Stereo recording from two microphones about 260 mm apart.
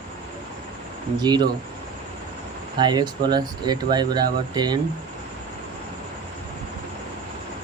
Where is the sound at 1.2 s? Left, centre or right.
Centre.